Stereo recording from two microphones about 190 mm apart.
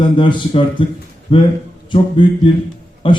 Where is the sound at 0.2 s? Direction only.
25° left (ahead or behind).